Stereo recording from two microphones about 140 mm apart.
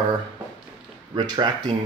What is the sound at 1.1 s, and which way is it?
Speech, 35° right (ahead or behind).